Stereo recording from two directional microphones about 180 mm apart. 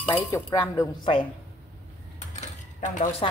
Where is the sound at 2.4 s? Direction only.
45° left (ahead or behind).